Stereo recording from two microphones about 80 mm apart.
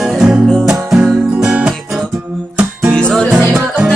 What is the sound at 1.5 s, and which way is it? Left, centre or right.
Music, centre.